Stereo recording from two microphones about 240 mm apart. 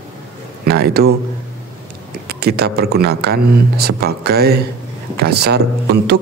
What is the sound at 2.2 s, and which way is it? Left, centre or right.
Speech, right.